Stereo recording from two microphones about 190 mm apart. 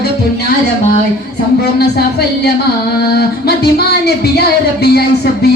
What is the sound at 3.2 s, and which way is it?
Speech, 55° left (ahead or behind).